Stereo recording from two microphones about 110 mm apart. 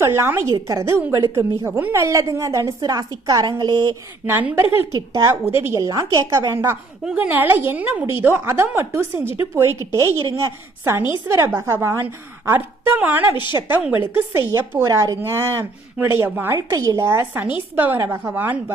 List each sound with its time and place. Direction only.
0.0 s a woman's voice: 20° right (ahead or behind); by 3.9 s 40° right (ahead or behind)
4.3 s a woman's voice: 15° right (ahead or behind)
5.8 s a woman's voice: 30° right (ahead or behind)
7.0 s a woman's voice: 10° right (ahead or behind)
16.6 s a woman's voice: 30° right (ahead or behind)